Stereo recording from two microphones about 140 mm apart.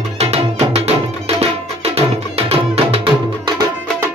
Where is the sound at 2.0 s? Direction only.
45° right (ahead or behind).